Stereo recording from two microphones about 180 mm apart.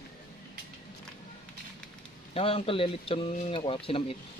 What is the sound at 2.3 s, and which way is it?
Speech, 30° left (ahead or behind).